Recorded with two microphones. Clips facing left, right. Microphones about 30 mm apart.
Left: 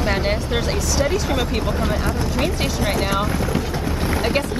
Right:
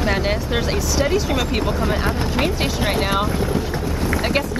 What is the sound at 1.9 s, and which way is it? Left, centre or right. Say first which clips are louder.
Speech: right 1 dB; right.